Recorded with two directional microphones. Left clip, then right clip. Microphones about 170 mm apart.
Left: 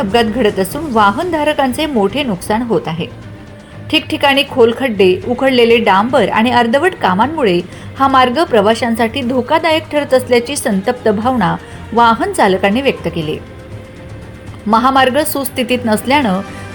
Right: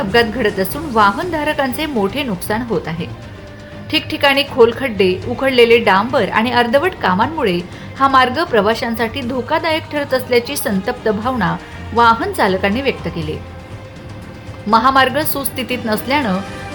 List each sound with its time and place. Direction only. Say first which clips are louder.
0.1 s a woman's voice: left 1 dB; 15° left (ahead or behind)
3.9 s a woman's voice: left 2 dB; 15° left (ahead or behind)
14.7 s a woman's voice: left 1 dB; 15° left (ahead or behind)